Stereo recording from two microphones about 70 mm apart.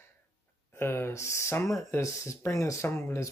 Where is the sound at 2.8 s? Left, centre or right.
Left.